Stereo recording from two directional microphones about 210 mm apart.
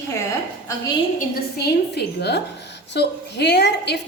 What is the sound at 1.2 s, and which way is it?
A woman's voice, 45° left (ahead or behind).